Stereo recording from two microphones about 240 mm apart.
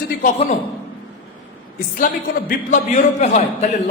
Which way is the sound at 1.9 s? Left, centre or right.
Left.